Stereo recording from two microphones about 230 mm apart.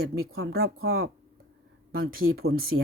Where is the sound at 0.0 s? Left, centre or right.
Right.